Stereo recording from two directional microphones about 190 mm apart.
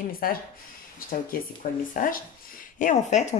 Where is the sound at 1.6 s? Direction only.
40° left (ahead or behind).